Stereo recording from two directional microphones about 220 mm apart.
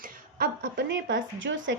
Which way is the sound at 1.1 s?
60° right (ahead or behind).